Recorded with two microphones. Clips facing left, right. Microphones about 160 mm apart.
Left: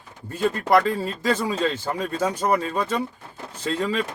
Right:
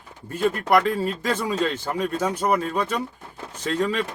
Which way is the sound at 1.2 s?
10° left (ahead or behind).